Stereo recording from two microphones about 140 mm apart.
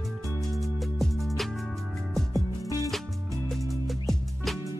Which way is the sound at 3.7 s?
Centre (ahead or behind).